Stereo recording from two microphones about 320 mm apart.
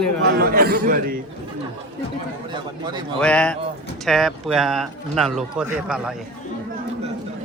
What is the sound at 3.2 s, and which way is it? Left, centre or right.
Speech, centre.